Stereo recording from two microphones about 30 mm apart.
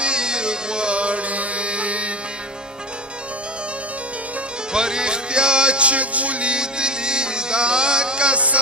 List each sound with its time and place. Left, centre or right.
0.0 s a sound: right
0.9 s music: right
4.7 s music: right
6.5 s music: right